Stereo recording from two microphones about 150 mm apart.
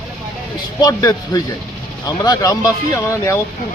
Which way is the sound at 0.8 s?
25° left (ahead or behind).